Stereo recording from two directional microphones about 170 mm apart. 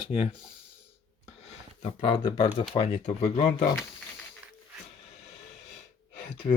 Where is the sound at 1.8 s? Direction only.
35° left (ahead or behind).